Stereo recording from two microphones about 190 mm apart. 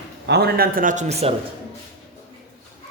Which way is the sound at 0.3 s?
60° right (ahead or behind).